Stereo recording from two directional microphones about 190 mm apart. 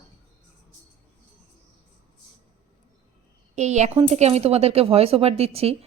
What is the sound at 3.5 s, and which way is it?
Speech, 35° right (ahead or behind).